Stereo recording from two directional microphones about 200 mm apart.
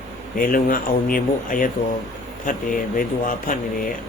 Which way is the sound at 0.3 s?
45° left (ahead or behind).